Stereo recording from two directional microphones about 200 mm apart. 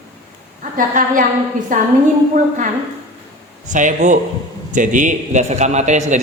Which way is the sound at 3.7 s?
40° right (ahead or behind).